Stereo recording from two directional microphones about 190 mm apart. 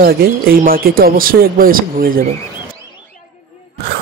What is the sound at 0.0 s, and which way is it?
Speech, 50° right (ahead or behind).